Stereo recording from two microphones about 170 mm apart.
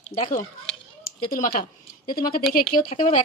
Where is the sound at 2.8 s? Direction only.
40° left (ahead or behind).